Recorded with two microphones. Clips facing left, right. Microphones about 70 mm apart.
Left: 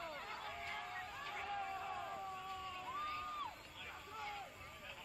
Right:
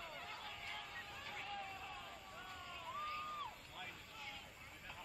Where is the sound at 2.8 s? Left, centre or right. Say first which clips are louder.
Even; centre.